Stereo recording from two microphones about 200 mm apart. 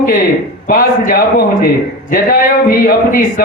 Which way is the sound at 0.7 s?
45° left (ahead or behind).